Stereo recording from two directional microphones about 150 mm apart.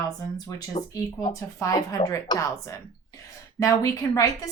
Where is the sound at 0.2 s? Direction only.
25° left (ahead or behind).